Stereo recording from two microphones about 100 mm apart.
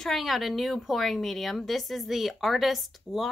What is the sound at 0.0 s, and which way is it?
A woman's voice, centre (ahead or behind).